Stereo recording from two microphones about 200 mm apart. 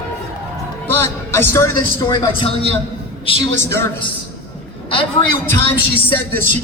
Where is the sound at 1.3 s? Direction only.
15° left (ahead or behind).